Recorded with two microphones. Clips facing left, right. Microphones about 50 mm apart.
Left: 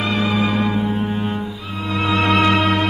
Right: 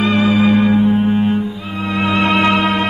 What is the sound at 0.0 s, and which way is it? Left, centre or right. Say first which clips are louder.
Music: right 6 dB; right.